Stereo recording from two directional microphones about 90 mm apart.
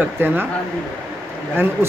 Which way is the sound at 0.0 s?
25° right (ahead or behind).